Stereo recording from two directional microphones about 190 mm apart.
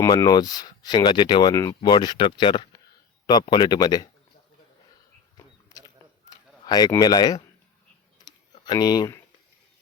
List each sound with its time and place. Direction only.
0.0 s speech: 20° left (ahead or behind)
6.3 s speech: 20° left (ahead or behind)
8.6 s speech: 20° left (ahead or behind)